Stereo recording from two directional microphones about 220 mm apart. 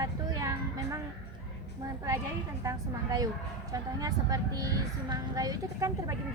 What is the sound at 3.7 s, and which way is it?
A woman's voice, 15° right (ahead or behind).